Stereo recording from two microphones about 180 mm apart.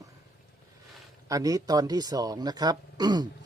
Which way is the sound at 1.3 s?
20° right (ahead or behind).